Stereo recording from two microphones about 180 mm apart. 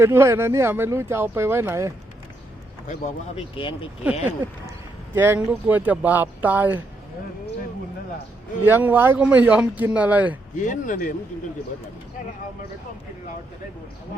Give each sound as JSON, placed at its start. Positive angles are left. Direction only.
{"t": 0.0, "sound": "speech", "side_deg": -15}
{"t": 2.8, "sound": "speech", "side_deg": 40}
{"t": 3.5, "sound": "speech", "side_deg": 30}
{"t": 5.1, "sound": "speech", "side_deg": -10}
{"t": 8.6, "sound": "speech", "side_deg": -10}
{"t": 10.6, "sound": "speech", "side_deg": 45}